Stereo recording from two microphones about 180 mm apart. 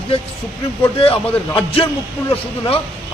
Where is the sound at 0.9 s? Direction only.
30° left (ahead or behind).